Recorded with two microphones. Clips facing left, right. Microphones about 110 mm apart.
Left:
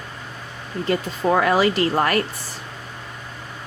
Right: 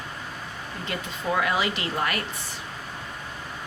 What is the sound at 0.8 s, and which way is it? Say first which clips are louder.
Speech: left 9 dB; 45° left (ahead or behind).